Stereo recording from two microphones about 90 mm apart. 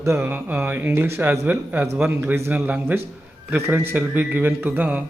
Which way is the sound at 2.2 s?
30° right (ahead or behind).